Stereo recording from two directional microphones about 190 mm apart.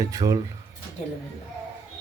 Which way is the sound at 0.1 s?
15° right (ahead or behind).